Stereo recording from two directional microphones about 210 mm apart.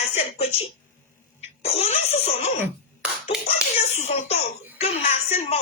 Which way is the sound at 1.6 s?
30° left (ahead or behind).